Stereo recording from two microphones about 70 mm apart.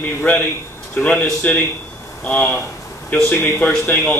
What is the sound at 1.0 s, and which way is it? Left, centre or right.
A man's voice, left.